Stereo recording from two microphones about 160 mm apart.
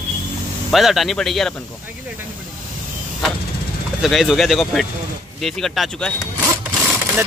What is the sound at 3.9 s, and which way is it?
Speech, centre (ahead or behind).